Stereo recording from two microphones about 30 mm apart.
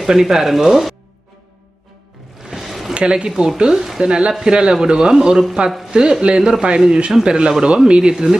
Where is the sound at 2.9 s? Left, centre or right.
Right.